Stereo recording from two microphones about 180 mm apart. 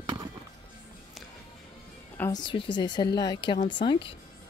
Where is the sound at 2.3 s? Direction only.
25° left (ahead or behind).